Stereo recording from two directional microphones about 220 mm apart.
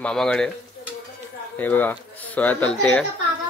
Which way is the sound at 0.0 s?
5° left (ahead or behind).